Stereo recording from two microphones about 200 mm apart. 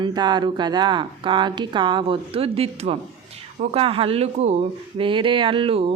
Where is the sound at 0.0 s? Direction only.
20° right (ahead or behind).